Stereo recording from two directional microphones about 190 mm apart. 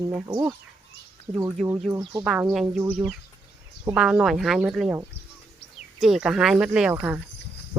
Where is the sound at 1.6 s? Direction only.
Centre (ahead or behind).